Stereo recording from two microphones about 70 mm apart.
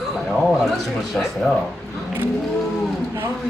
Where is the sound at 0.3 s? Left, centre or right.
Centre.